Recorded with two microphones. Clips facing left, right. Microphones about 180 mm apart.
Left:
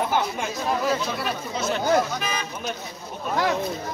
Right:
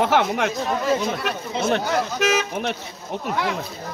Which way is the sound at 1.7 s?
80° right.